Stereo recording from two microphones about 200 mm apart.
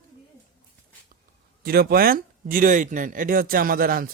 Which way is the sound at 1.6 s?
50° right (ahead or behind).